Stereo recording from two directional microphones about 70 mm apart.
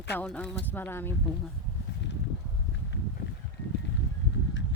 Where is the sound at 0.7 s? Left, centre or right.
Left.